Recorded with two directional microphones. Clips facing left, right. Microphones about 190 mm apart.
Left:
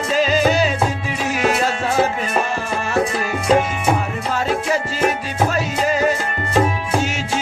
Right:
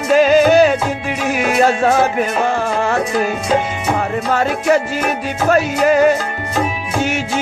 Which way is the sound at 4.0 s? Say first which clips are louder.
Right 5 dB; 65° right (ahead or behind).